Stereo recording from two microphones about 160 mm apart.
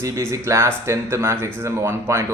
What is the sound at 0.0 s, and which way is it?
Speech, 15° right (ahead or behind).